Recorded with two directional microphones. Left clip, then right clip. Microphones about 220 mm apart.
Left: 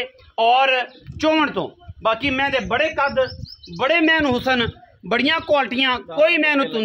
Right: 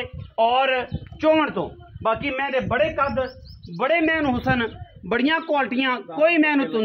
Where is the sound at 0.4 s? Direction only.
50° left (ahead or behind).